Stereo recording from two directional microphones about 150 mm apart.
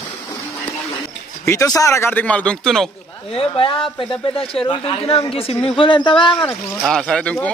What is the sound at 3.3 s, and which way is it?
Speech, 35° left (ahead or behind).